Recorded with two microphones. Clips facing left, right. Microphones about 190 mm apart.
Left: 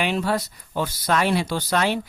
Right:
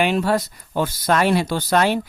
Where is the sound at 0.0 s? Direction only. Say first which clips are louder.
Right 4 dB; 50° right (ahead or behind).